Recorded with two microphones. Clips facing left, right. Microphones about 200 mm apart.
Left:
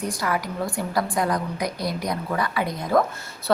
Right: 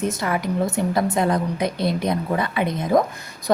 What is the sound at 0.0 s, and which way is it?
A woman's voice, 25° right (ahead or behind).